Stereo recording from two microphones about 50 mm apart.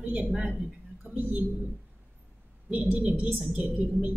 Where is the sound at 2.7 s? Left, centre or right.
Right.